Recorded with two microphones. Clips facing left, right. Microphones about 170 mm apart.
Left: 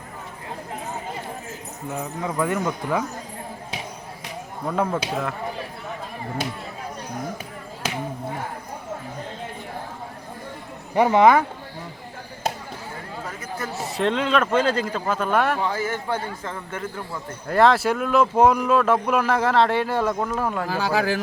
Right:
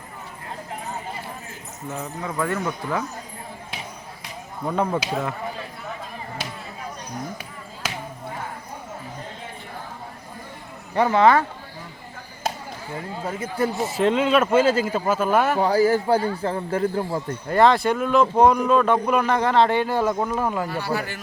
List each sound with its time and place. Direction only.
1.9 s speech: 15° left (ahead or behind)
4.7 s speech: centre (ahead or behind)
10.9 s speech: 15° left (ahead or behind)
13.2 s speech: 30° right (ahead or behind)
13.7 s speech: centre (ahead or behind)
15.6 s a man's voice: 35° right (ahead or behind)
17.5 s speech: centre (ahead or behind)
20.7 s speech: 90° left